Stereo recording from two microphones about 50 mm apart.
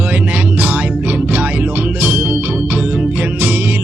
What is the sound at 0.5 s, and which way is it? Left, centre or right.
Music, right.